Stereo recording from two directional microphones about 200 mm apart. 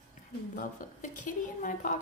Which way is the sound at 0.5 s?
40° left (ahead or behind).